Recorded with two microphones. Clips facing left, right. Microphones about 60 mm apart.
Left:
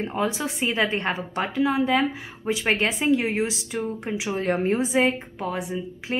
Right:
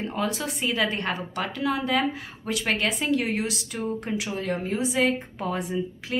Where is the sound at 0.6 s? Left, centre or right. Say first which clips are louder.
Left 2 dB; left.